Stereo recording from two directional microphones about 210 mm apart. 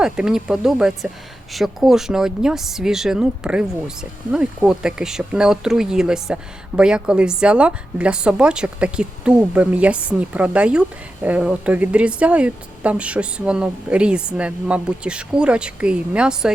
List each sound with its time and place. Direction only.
0.0 s a woman's voice: 5° right (ahead or behind)